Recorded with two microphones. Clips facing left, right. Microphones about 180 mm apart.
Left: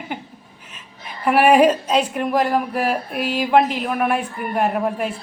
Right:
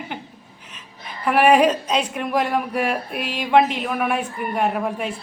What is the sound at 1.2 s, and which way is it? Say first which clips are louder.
A woman's voice: left 2 dB; 5° left (ahead or behind).